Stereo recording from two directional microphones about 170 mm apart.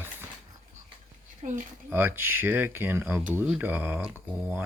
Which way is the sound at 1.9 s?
10° right (ahead or behind).